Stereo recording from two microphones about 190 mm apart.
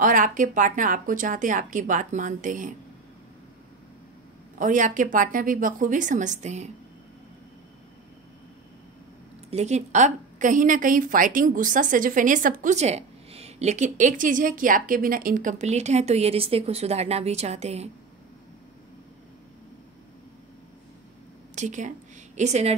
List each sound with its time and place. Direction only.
0.0 s speech: 45° right (ahead or behind)
4.6 s speech: 40° right (ahead or behind)
9.5 s a woman's voice: 35° right (ahead or behind)
21.5 s a woman's voice: 40° right (ahead or behind)